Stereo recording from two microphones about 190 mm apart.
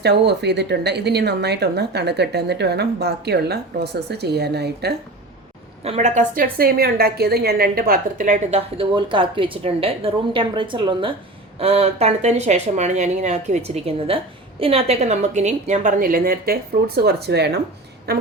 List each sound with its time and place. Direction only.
0.0 s speech: 60° right (ahead or behind)
5.8 s a woman's voice: 35° right (ahead or behind); by 17.5 s 60° right (ahead or behind)